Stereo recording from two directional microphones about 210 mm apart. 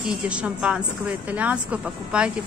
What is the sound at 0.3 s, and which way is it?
Speech, 5° right (ahead or behind).